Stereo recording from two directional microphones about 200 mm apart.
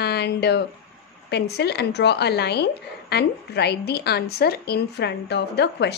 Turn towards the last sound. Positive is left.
turn(degrees=55)  # may be behind; listen again after turning